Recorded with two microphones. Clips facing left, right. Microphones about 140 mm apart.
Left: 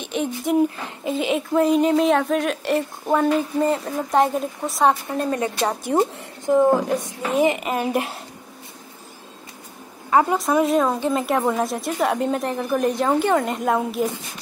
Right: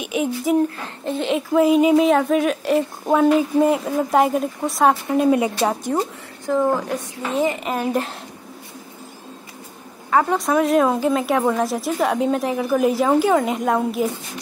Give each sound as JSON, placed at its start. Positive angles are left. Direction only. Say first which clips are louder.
{"t": 0.0, "sound": "speech", "louder": "right 3 dB", "side_deg": -5}
{"t": 0.7, "sound": "speech", "louder": "even", "side_deg": 10}
{"t": 5.9, "sound": "a woman's voice", "louder": "left 3 dB", "side_deg": 20}
{"t": 7.6, "sound": "speech", "louder": "right 1 dB", "side_deg": 5}
{"t": 10.3, "sound": "speech", "louder": "right 1 dB", "side_deg": 0}